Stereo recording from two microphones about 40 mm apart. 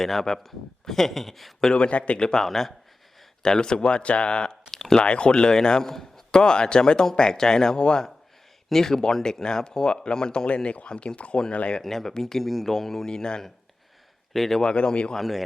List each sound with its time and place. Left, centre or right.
0.0 s speech: centre
1.7 s speech: left
2.1 s speech: centre
2.4 s a man's voice: centre
3.4 s speech: centre
4.7 s a sound: centre
4.9 s a man's voice: left
11.8 s a man's voice: centre
14.3 s a man's voice: centre
14.7 s speech: left
15.1 s speech: centre